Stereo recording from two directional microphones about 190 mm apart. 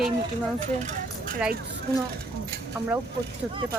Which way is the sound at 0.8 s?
45° right (ahead or behind).